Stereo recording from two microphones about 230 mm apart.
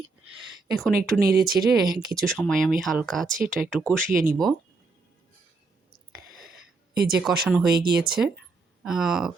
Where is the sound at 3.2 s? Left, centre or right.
Right.